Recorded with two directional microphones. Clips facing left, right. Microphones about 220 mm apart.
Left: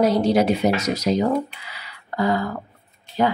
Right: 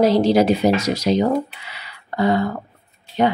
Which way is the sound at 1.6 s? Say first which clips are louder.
Right 1 dB; 25° right (ahead or behind).